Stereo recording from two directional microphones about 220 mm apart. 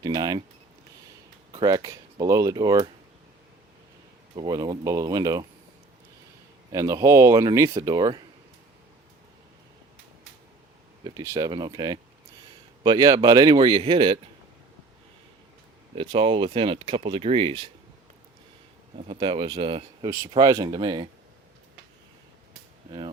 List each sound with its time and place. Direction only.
0.0 s speech: 15° right (ahead or behind)
1.5 s speech: 15° right (ahead or behind)
4.4 s speech: 15° right (ahead or behind)
6.7 s speech: 15° right (ahead or behind)
11.0 s speech: 15° right (ahead or behind)
16.0 s speech: 25° right (ahead or behind)
18.9 s speech: 25° right (ahead or behind)